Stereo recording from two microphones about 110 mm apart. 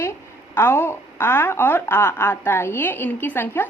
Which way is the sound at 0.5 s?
20° left (ahead or behind).